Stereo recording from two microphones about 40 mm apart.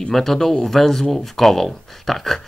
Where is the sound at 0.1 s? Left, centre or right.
Centre.